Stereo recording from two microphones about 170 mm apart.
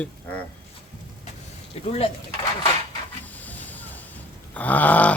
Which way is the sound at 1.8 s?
40° left (ahead or behind).